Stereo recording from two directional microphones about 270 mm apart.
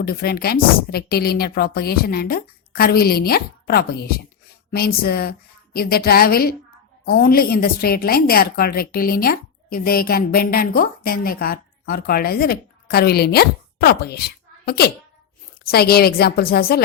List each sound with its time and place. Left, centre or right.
0.0 s a woman's voice: left